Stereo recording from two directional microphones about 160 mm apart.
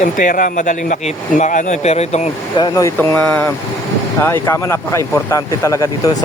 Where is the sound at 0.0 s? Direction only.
55° left (ahead or behind).